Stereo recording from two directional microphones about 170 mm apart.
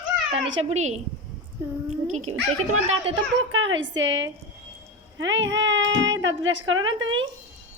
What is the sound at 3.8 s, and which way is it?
Speech, 90° right.